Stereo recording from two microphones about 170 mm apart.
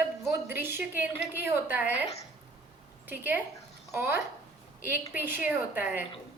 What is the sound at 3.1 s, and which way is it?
A woman's voice, 10° right (ahead or behind).